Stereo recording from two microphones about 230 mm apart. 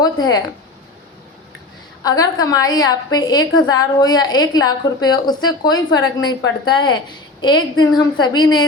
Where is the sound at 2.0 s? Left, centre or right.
Centre.